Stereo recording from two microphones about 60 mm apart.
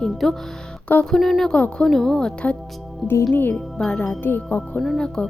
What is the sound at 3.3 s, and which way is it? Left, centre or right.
Speech, left.